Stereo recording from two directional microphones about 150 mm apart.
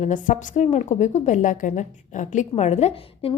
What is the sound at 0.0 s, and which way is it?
A woman's voice, 60° left (ahead or behind).